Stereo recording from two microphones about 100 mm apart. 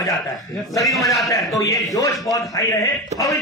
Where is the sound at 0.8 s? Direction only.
Centre (ahead or behind).